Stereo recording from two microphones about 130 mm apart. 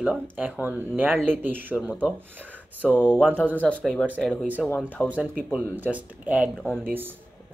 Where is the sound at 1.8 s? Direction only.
5° left (ahead or behind).